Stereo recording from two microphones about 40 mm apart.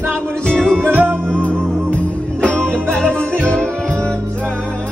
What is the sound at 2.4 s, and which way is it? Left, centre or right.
Music, left.